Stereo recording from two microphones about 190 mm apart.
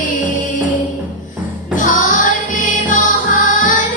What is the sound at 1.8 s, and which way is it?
Music, 40° left (ahead or behind).